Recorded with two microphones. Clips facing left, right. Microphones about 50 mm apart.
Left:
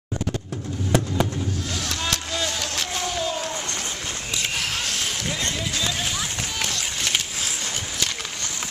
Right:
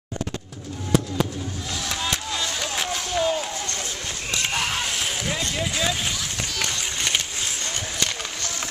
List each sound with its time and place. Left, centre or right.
2.7 s a sound: centre
5.6 s run: centre
6.6 s run: centre